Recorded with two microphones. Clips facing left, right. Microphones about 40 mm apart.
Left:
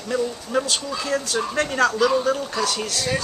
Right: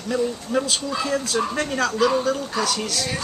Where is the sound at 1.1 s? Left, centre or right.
Centre.